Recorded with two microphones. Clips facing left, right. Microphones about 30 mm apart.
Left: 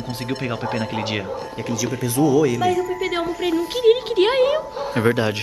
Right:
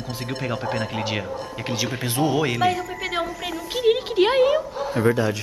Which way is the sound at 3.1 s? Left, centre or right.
Centre.